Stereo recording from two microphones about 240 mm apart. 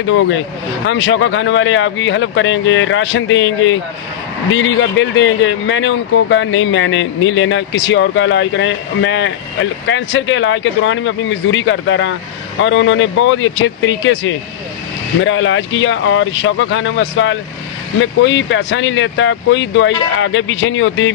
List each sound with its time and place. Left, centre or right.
0.0 s speech: left